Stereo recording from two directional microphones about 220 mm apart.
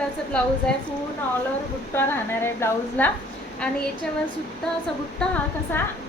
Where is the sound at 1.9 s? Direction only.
10° left (ahead or behind).